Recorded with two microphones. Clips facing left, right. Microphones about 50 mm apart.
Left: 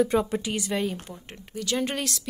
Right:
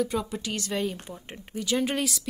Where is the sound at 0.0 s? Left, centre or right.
Left.